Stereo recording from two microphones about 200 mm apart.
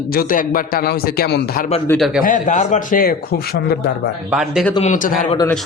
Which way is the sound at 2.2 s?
40° left (ahead or behind).